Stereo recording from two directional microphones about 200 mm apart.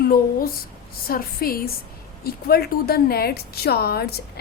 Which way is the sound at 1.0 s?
45° left (ahead or behind).